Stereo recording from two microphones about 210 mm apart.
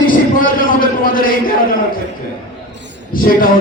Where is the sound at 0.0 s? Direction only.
40° left (ahead or behind).